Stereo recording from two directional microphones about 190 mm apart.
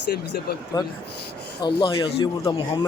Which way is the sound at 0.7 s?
20° left (ahead or behind).